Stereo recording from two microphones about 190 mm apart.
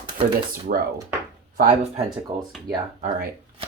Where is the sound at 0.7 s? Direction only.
50° right (ahead or behind).